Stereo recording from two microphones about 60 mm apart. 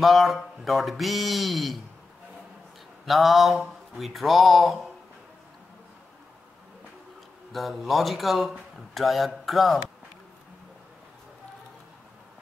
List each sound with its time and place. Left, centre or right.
0.0 s speech: centre
3.1 s speech: centre
7.5 s speech: centre